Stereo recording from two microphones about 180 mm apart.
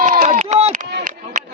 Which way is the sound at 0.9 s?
65° right (ahead or behind).